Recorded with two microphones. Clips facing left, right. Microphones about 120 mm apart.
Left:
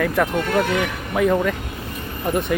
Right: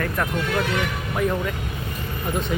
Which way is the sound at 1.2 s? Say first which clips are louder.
Left 6 dB; 90° left.